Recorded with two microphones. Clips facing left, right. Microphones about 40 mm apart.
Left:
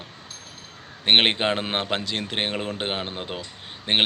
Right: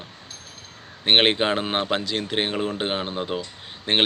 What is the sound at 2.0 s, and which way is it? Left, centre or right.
Speech, left.